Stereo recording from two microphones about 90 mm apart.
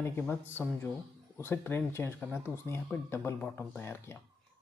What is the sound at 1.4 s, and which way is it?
Speech, 25° left (ahead or behind).